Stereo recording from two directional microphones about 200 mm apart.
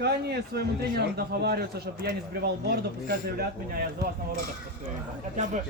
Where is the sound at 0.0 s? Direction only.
55° right (ahead or behind).